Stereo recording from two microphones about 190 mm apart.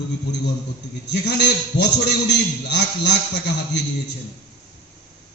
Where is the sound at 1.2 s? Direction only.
60° left (ahead or behind).